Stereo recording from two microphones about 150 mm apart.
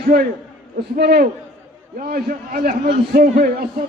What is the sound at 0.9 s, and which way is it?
Speech, 90° right.